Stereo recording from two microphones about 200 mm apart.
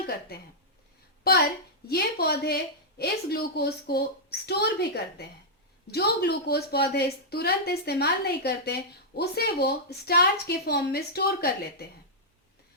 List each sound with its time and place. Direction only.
0.3 s a woman's voice: 50° left (ahead or behind)
1.9 s a woman's voice: 55° left (ahead or behind)